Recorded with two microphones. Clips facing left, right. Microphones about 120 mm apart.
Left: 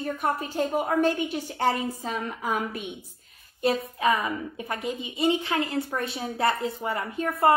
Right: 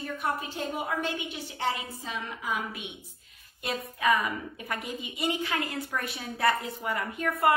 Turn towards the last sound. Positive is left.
turn(degrees=30)  # may be behind; listen again after turning